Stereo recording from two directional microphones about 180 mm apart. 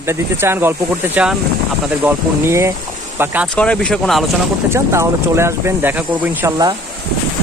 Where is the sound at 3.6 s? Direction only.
5° left (ahead or behind).